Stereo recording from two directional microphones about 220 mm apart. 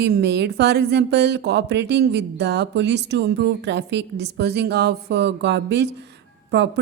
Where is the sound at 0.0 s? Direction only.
50° right (ahead or behind).